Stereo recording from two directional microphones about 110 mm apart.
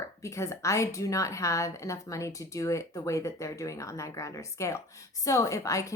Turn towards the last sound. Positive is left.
turn(degrees=30)  # may be behind; listen again after turning